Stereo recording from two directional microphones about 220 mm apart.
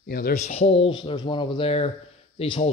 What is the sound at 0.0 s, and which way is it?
Speech, 45° left (ahead or behind).